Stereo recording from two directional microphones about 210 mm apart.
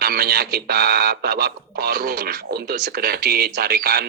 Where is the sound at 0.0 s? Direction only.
45° right (ahead or behind).